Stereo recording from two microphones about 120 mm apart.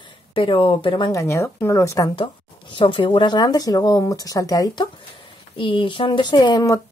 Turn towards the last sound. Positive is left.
turn(degrees=40)  # may be behind; listen again after turning